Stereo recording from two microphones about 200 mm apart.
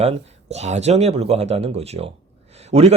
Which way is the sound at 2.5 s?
30° right (ahead or behind).